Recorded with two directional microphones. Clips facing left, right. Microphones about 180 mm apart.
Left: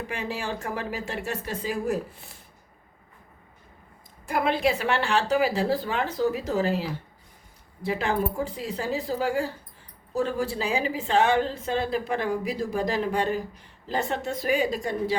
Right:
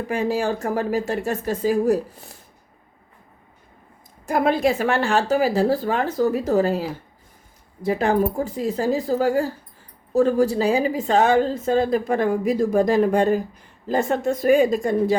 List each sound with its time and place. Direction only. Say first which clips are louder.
0.1 s a woman's voice: right 12 dB; 40° right (ahead or behind)
4.3 s a woman's voice: right 5 dB; 45° right (ahead or behind)